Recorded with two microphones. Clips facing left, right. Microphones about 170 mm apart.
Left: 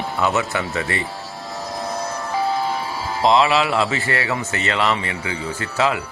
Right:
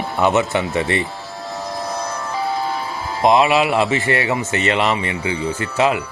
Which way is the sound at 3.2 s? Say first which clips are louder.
Right 2 dB; 20° right (ahead or behind).